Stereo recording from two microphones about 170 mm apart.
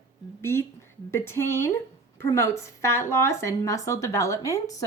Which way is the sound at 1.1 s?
15° left (ahead or behind).